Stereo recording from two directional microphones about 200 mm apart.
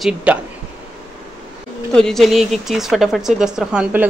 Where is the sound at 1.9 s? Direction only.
Centre (ahead or behind).